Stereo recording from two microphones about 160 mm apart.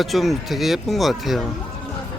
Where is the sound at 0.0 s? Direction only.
Centre (ahead or behind).